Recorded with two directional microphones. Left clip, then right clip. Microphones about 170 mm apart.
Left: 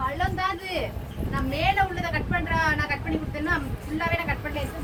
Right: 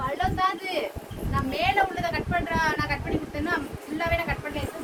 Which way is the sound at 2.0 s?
90° right.